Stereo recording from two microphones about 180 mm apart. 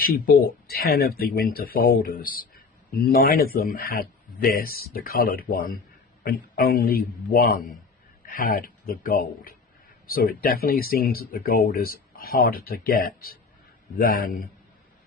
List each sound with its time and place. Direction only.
0.7 s a man's voice: 60° left (ahead or behind)